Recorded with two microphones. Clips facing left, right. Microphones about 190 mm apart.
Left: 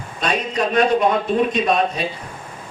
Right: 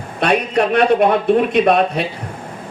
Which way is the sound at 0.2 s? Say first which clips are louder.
Right 6 dB; 60° right (ahead or behind).